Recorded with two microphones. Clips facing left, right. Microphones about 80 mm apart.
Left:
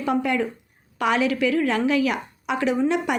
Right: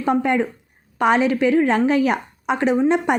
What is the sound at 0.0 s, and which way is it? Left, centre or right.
A woman's voice, right.